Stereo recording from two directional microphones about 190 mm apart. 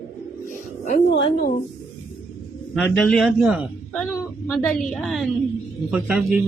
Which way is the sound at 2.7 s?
Centre (ahead or behind).